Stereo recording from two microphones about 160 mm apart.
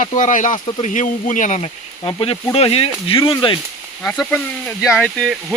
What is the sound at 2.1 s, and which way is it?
Speech, 35° left (ahead or behind).